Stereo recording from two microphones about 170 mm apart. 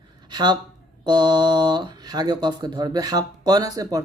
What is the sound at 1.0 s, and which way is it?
Speech, 25° right (ahead or behind).